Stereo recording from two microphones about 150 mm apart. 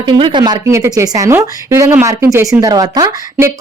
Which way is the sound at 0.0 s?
30° right (ahead or behind).